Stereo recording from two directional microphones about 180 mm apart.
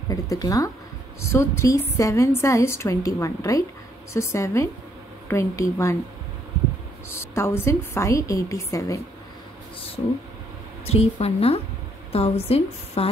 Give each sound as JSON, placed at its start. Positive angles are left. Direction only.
{"t": 0.1, "sound": "a woman's voice", "side_deg": 20}
{"t": 7.1, "sound": "a woman's voice", "side_deg": 15}
{"t": 10.9, "sound": "a woman's voice", "side_deg": 35}